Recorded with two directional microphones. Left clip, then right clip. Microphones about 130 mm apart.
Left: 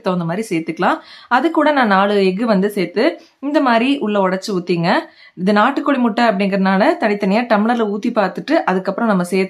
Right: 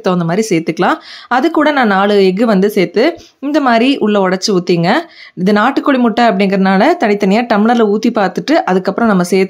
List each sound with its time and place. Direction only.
0.0 s speech: 40° right (ahead or behind)